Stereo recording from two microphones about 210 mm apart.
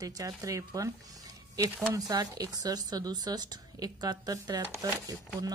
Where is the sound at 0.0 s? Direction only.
15° right (ahead or behind).